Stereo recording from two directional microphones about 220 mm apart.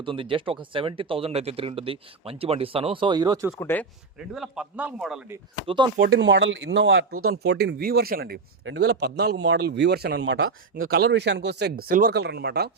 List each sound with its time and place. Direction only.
0.0 s speech: 25° right (ahead or behind)
3.6 s speech: 10° left (ahead or behind)
4.4 s a man's voice: 5° right (ahead or behind)
5.6 s speech: 20° right (ahead or behind)
6.0 s speech: 50° right (ahead or behind); by 7.3 s 80° right
7.4 s speech: 45° right (ahead or behind)
10.2 s speech: 60° right (ahead or behind)
10.8 s speech: 45° right (ahead or behind)